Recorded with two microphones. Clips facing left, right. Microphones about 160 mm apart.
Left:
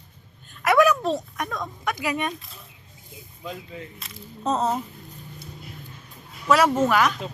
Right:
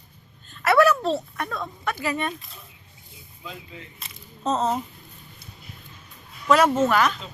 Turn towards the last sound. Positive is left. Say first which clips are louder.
# even
turn(degrees=10)  # may be behind; listen again after turning